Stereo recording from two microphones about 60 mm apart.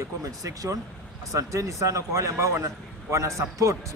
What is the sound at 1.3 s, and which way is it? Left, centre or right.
A man's voice, right.